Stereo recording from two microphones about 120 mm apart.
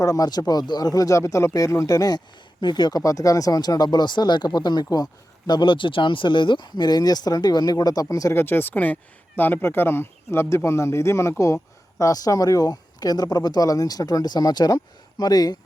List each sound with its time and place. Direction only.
0.0 s speech: 30° left (ahead or behind)